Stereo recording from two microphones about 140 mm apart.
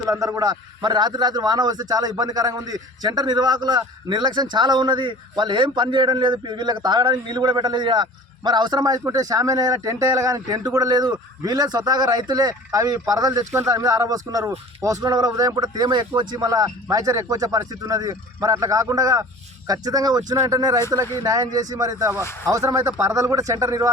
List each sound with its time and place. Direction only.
0.1 s a man's voice: 25° right (ahead or behind)